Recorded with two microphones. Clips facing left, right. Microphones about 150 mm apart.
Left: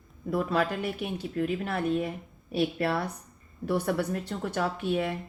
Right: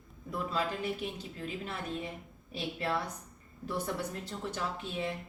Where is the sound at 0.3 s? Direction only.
65° left (ahead or behind).